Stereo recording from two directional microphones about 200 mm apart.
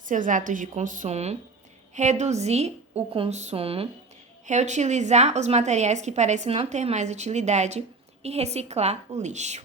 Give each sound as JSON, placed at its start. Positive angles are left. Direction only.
{"t": 0.0, "sound": "a woman's voice", "side_deg": -40}